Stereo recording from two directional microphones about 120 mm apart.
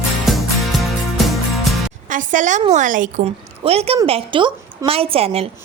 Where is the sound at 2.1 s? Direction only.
90° right.